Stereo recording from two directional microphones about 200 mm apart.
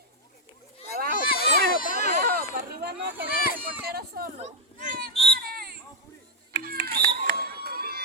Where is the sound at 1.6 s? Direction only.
50° right (ahead or behind).